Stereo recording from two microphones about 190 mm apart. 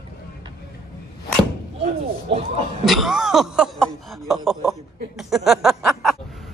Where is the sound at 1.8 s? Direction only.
35° right (ahead or behind).